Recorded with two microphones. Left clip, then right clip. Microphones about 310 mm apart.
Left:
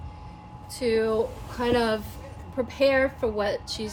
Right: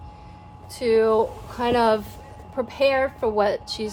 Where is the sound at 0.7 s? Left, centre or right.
Centre.